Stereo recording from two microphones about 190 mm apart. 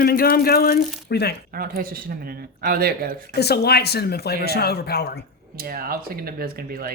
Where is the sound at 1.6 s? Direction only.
50° right (ahead or behind).